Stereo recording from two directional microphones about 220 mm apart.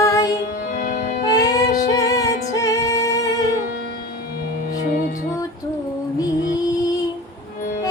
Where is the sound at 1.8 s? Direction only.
15° left (ahead or behind).